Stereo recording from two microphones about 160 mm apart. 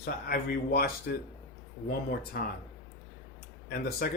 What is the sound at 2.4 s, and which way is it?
Speech, 70° left (ahead or behind).